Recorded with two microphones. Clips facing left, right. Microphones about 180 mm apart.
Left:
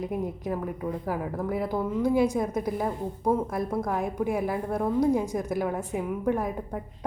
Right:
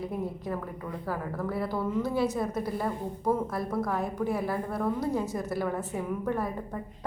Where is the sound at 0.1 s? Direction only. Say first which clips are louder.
Left 3 dB; 15° left (ahead or behind).